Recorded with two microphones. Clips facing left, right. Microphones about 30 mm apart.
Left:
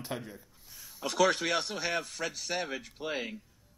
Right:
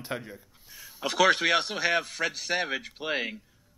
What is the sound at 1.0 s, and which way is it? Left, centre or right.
A man's voice, right.